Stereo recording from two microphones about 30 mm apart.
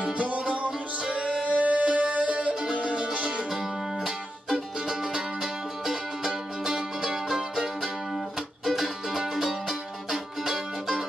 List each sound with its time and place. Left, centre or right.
0.2 s music: right
1.1 s music: right
2.6 s music: right
3.5 s music: centre